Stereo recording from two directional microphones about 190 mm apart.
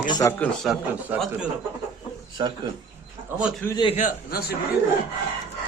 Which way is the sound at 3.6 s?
20° left (ahead or behind).